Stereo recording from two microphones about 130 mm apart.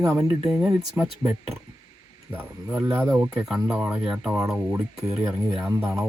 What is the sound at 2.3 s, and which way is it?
Speech, 15° right (ahead or behind).